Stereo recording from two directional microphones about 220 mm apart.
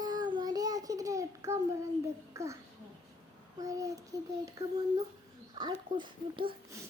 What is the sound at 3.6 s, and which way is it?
Speech, 15° right (ahead or behind).